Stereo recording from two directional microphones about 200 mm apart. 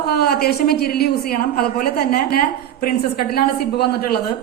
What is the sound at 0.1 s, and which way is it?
A woman's voice, 50° left (ahead or behind).